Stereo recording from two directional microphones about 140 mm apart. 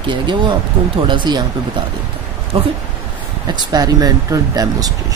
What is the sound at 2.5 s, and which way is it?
Speech, 40° right (ahead or behind).